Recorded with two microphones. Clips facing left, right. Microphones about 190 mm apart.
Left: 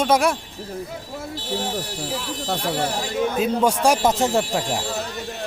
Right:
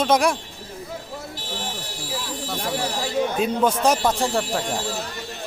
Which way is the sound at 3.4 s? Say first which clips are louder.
Left 2 dB; 10° left (ahead or behind).